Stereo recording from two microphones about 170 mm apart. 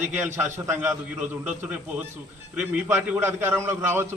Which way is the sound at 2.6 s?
5° right (ahead or behind).